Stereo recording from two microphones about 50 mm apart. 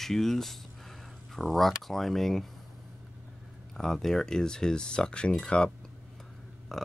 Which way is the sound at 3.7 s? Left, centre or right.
Centre.